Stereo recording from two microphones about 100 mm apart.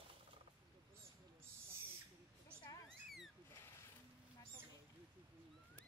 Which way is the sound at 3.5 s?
25° left (ahead or behind).